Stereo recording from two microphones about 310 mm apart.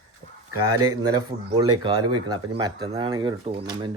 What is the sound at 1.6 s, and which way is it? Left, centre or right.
Speech, centre.